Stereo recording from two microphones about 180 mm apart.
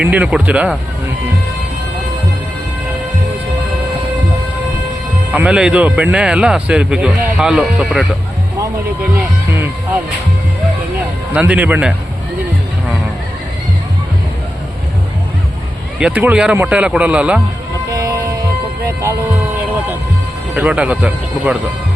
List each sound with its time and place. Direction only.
0.0 s speech: 5° right (ahead or behind)
5.3 s speech: 5° right (ahead or behind)
11.3 s speech: 10° right (ahead or behind)
16.0 s speech: 5° right (ahead or behind)
17.8 s music: 20° right (ahead or behind)
20.6 s speech: 5° right (ahead or behind)